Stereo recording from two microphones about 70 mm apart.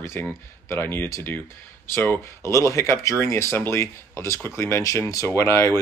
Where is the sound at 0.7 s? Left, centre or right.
Left.